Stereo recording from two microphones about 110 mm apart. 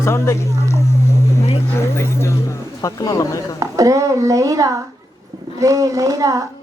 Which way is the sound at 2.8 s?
30° left (ahead or behind).